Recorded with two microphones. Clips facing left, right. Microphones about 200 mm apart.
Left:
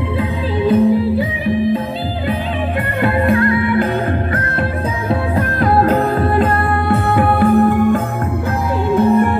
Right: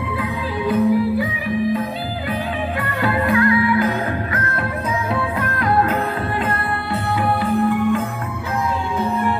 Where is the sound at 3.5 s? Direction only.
55° left (ahead or behind).